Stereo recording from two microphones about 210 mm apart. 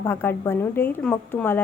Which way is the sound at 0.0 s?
10° left (ahead or behind).